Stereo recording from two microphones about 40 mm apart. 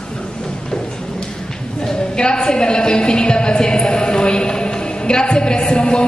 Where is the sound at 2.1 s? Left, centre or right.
Left.